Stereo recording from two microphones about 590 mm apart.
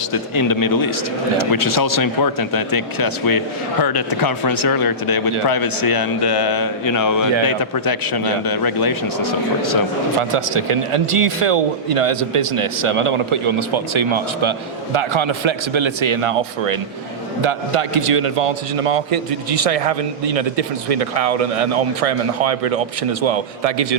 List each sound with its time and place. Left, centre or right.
0.1 s speech: left
10.2 s a man's voice: right